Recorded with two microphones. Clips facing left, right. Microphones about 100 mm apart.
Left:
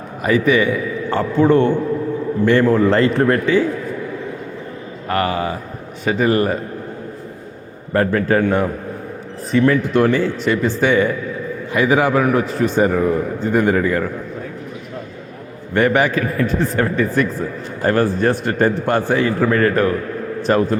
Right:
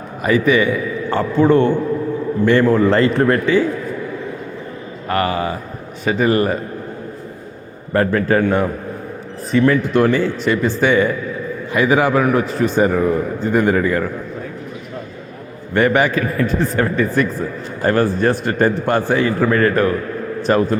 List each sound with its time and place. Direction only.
0.2 s a man's voice: 25° right (ahead or behind)
5.0 s a man's voice: 25° right (ahead or behind)
7.9 s a man's voice: 25° right (ahead or behind)
15.7 s a man's voice: 25° right (ahead or behind)